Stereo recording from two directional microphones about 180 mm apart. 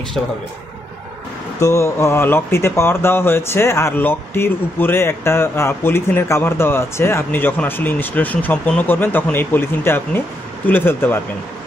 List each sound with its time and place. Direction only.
1.6 s speech: 15° left (ahead or behind)